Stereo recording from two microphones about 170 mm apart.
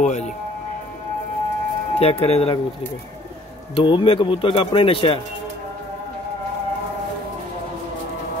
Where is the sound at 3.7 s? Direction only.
30° left (ahead or behind).